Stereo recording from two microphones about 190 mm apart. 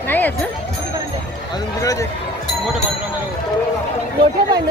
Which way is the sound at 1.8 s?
15° left (ahead or behind).